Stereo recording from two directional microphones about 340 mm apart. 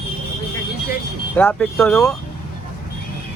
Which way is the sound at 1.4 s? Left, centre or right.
Centre.